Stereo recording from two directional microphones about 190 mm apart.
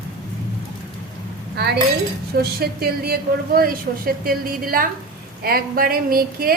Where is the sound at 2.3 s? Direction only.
55° right (ahead or behind).